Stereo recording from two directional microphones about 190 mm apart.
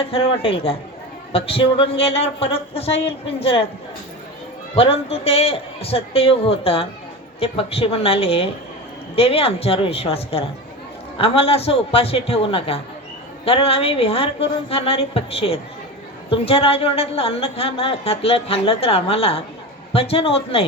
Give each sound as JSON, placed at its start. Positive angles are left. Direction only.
{"t": 0.1, "sound": "speech", "side_deg": 30}
{"t": 4.7, "sound": "a woman's voice", "side_deg": 30}